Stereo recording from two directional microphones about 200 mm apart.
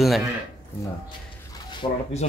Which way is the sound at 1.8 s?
25° left (ahead or behind).